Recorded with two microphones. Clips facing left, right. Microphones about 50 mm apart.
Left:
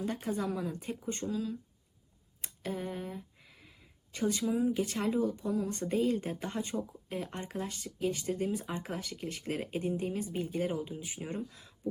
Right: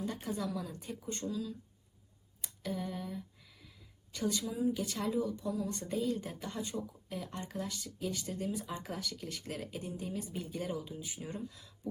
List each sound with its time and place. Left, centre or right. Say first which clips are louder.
0.0 s speech: left 3 dB; left